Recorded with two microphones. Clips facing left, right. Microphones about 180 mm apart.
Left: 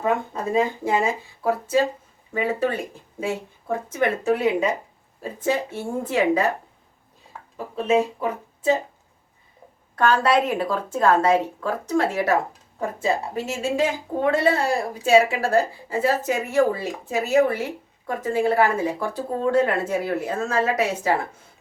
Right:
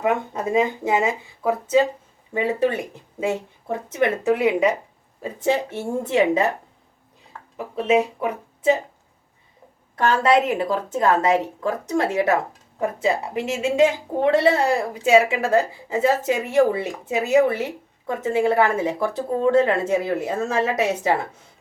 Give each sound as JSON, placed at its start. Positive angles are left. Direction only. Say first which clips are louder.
{"t": 0.0, "sound": "a woman's voice", "louder": "right 1 dB", "side_deg": -20}
{"t": 7.5, "sound": "speech", "louder": "right 1 dB", "side_deg": -15}
{"t": 9.9, "sound": "a woman's voice", "louder": "right 1 dB", "side_deg": -20}